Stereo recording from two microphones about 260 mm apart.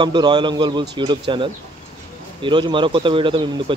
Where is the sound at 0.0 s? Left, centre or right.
Centre.